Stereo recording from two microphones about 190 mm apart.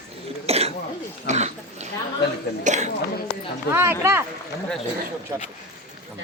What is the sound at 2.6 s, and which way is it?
Speech, 40° right (ahead or behind).